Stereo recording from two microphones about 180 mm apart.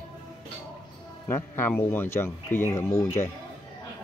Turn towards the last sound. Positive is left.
turn(degrees=15)  # may be behind; listen again after turning